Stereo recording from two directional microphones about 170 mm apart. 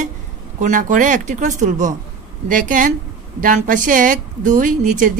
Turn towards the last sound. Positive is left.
turn(degrees=-50)  # may be behind; listen again after turning